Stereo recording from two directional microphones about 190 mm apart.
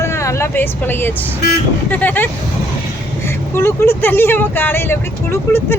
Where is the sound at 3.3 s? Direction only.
15° left (ahead or behind).